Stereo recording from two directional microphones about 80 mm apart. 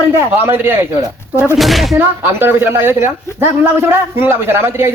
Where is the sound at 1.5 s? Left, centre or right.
Centre.